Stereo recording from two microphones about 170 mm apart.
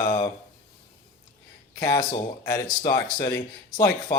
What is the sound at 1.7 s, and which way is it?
Speech, 25° left (ahead or behind).